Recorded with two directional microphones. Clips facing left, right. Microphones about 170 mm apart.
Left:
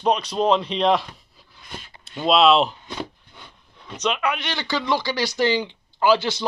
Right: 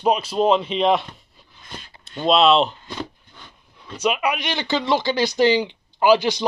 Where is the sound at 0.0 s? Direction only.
5° right (ahead or behind).